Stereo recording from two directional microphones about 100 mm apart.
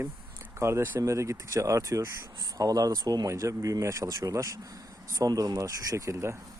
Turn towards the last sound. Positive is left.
turn(degrees=-30)  # may be behind; listen again after turning